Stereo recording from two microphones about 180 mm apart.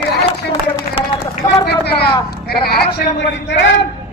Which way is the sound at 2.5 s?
60° left (ahead or behind).